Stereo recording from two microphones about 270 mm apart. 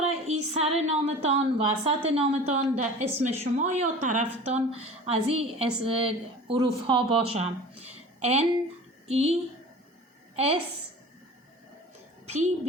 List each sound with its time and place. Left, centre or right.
0.0 s female singing: right
0.5 s a woman's voice: right
10.3 s a woman's voice: right
12.2 s a sound: right